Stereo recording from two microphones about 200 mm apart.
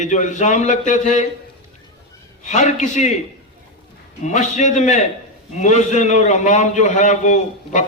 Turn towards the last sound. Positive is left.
turn(degrees=35)  # may be behind; listen again after turning